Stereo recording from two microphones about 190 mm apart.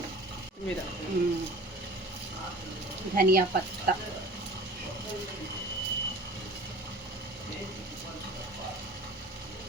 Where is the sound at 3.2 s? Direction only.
50° right (ahead or behind).